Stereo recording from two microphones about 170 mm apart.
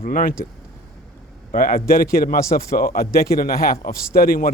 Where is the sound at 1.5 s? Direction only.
60° left (ahead or behind).